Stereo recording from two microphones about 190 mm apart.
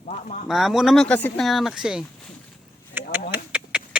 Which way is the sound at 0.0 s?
40° left (ahead or behind).